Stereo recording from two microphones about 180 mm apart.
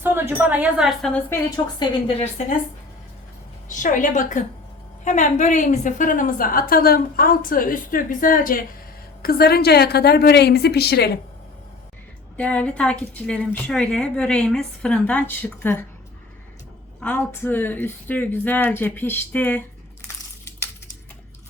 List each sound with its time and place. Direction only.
0.0 s speech: 10° right (ahead or behind)
1.3 s a woman's voice: 20° left (ahead or behind)
3.7 s a woman's voice: 45° left (ahead or behind); by 11.2 s 65° left (ahead or behind)
12.4 s a woman's voice: 10° left (ahead or behind)
17.0 s a woman's voice: 10° left (ahead or behind)